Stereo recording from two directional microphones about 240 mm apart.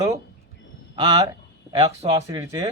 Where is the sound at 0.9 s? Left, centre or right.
Centre.